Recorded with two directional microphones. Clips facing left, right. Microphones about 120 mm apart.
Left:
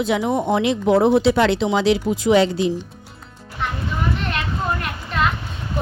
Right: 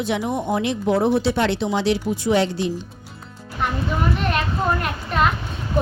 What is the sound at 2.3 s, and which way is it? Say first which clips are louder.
Speech: left 4 dB; 70° left (ahead or behind).